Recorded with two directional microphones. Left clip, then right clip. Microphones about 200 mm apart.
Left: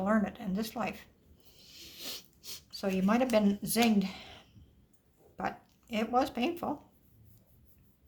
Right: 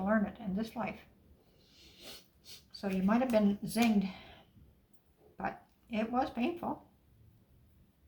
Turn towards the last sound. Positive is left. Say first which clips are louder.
# left 4 dB
turn(degrees=45)  # may be behind; listen again after turning